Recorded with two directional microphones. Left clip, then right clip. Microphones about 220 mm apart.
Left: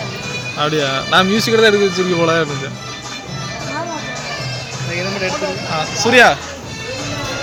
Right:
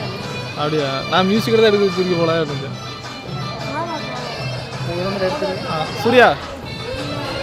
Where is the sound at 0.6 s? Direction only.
5° left (ahead or behind).